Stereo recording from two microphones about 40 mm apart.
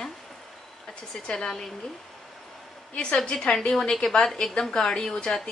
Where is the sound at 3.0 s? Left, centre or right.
Left.